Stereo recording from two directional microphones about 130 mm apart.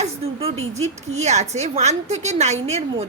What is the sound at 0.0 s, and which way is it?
A woman's voice, 50° right (ahead or behind).